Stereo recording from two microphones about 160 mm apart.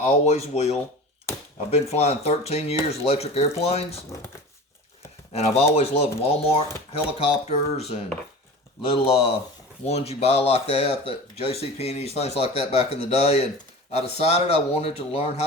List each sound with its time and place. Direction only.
0.0 s speech: 45° left (ahead or behind)
5.3 s speech: 40° left (ahead or behind)